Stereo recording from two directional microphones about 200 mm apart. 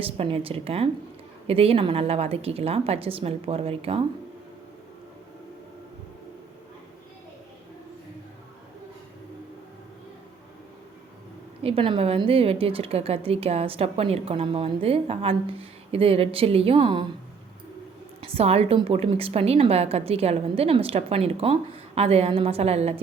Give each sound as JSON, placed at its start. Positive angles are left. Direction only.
{"t": 0.0, "sound": "a woman's voice", "side_deg": -30}
{"t": 11.6, "sound": "a woman's voice", "side_deg": -25}
{"t": 18.3, "sound": "a woman's voice", "side_deg": -30}